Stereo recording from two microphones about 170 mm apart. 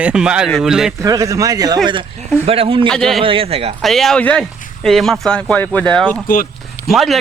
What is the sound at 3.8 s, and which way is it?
Speech, centre (ahead or behind).